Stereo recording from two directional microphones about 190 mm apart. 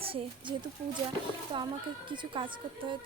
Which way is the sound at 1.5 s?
25° right (ahead or behind).